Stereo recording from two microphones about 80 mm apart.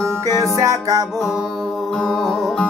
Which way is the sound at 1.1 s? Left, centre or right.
Centre.